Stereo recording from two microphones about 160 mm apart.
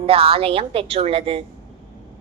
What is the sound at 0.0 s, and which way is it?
A woman's voice, 35° right (ahead or behind).